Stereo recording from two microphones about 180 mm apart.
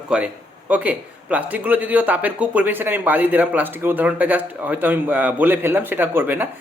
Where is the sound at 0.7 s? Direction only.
10° right (ahead or behind).